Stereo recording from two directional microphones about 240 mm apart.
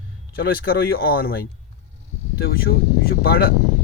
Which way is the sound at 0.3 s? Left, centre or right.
Left.